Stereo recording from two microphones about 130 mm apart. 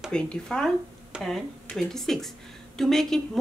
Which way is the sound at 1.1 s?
Centre (ahead or behind).